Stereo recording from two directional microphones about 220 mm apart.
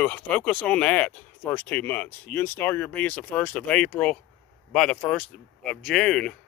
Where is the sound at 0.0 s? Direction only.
5° left (ahead or behind).